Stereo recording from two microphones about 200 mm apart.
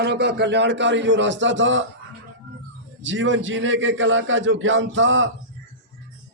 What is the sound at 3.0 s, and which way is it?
A man's voice, 70° right (ahead or behind).